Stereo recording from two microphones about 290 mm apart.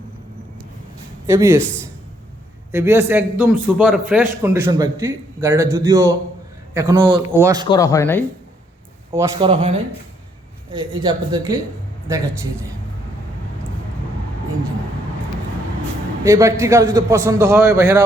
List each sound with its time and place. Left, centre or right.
1.3 s a man's voice: centre
2.7 s a man's voice: centre
7.7 s speech: centre
9.1 s a man's voice: centre
16.2 s a man's voice: centre